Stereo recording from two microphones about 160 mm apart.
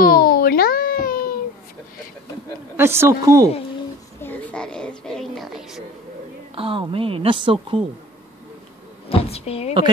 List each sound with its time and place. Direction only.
0.0 s a sound: 65° left (ahead or behind)
2.8 s a woman's voice: 15° right (ahead or behind)
4.2 s a child's voice: 10° left (ahead or behind)
6.5 s a woman's voice: 35° right (ahead or behind)
9.3 s speech: 40° left (ahead or behind)